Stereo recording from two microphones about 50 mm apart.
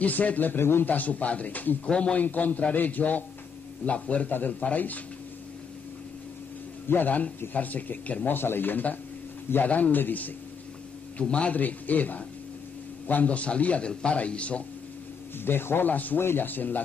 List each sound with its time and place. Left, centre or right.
0.0 s a man's voice: left
0.8 s a man's voice: left
1.9 s a man's voice: centre
2.1 s a man's voice: left
6.9 s a man's voice: left
8.4 s a man's voice: left
11.1 s a man's voice: left
11.5 s a man's voice: left
15.4 s a man's voice: left
15.9 s a man's voice: left
16.2 s a man's voice: left